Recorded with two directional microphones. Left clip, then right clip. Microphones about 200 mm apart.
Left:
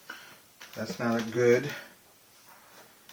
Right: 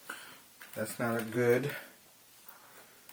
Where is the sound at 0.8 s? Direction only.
45° right (ahead or behind).